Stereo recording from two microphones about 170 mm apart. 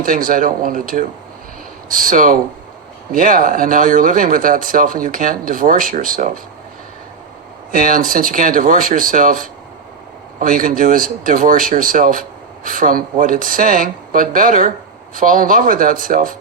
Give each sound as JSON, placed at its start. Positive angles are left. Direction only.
{"t": 0.0, "sound": "speech", "side_deg": -55}
{"t": 7.7, "sound": "speech", "side_deg": -55}